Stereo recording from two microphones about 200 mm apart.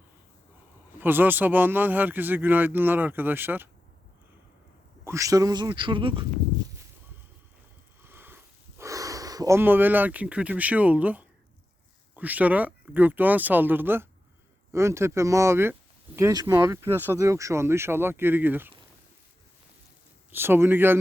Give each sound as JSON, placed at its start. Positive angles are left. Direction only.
{"t": 0.9, "sound": "speech", "side_deg": -10}
{"t": 5.0, "sound": "speech", "side_deg": -15}
{"t": 8.0, "sound": "a sound", "side_deg": -10}
{"t": 8.8, "sound": "speech", "side_deg": -15}
{"t": 20.3, "sound": "speech", "side_deg": -10}